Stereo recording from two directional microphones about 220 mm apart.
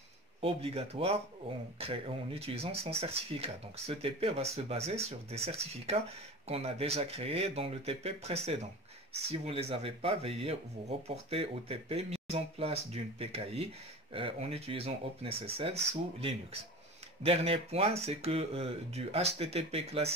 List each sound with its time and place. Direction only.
0.4 s speech: 25° right (ahead or behind)